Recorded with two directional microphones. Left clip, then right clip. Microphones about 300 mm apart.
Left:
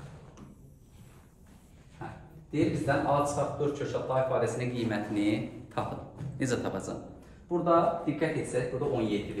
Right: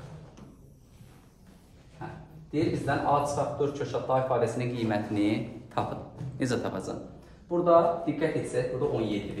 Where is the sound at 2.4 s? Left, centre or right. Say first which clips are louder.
Even; centre.